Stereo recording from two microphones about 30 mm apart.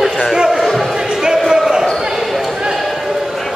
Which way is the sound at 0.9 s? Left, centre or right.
Centre.